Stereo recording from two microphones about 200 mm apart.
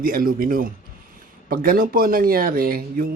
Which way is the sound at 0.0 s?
45° right (ahead or behind).